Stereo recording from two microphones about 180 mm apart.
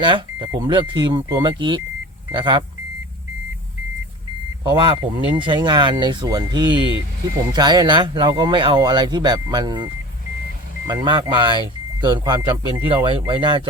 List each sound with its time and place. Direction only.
0.0 s speech: 25° right (ahead or behind)
4.7 s speech: 30° right (ahead or behind)